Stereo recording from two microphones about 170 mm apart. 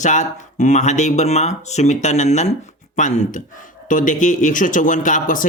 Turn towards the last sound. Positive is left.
turn(degrees=50)  # may be behind; listen again after turning